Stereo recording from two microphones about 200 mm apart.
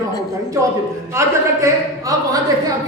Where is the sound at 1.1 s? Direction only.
15° right (ahead or behind).